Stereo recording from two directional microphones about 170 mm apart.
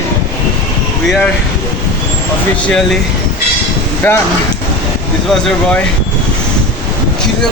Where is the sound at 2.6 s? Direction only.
5° left (ahead or behind).